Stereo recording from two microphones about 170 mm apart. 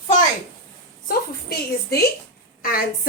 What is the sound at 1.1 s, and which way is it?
A woman's voice, 65° left (ahead or behind).